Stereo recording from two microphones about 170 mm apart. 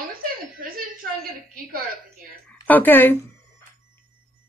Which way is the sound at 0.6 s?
60° right (ahead or behind).